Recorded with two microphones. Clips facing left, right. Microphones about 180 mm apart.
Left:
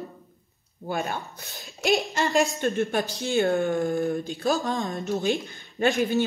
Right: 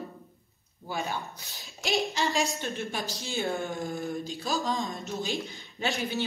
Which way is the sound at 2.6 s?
55° left (ahead or behind).